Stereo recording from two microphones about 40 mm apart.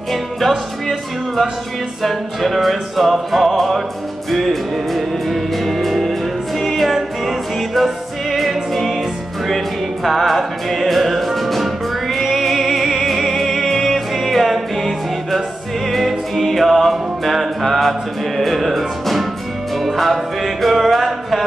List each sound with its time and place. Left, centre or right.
0.1 s music: centre
10.0 s music: centre